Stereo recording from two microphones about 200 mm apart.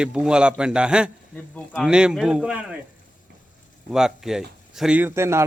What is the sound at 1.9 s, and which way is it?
Speech, 5° right (ahead or behind).